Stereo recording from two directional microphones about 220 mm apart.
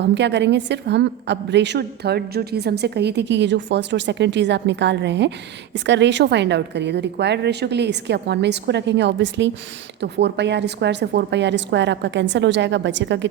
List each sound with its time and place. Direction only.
0.0 s a woman's voice: 50° right (ahead or behind)